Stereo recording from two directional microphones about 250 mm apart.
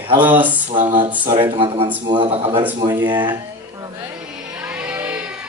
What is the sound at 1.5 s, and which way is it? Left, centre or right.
Speech, right.